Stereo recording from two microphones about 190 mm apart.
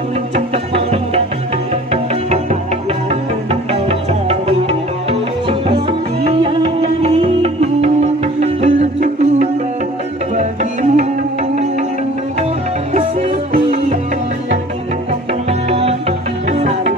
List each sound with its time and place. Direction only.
4.3 s music: 35° right (ahead or behind)
15.7 s music: 30° right (ahead or behind)